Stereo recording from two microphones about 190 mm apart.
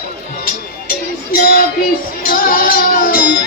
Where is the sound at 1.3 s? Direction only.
50° left (ahead or behind).